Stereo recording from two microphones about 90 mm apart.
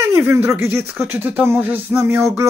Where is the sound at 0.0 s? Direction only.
30° right (ahead or behind).